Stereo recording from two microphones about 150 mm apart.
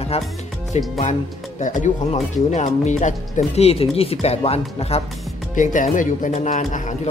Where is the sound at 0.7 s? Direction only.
55° left (ahead or behind).